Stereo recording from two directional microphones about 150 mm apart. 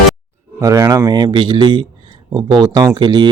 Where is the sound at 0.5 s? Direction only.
20° right (ahead or behind).